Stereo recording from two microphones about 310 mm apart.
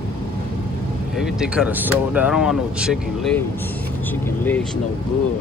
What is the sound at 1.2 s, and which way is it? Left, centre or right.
Speech, centre.